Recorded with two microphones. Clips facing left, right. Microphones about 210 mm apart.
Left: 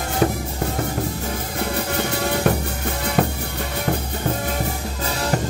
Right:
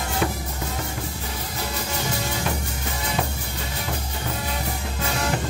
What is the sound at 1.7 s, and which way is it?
Music, 60° left (ahead or behind).